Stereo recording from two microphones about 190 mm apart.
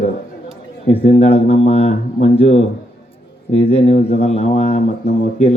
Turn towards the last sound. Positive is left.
turn(degrees=35)  # may be behind; listen again after turning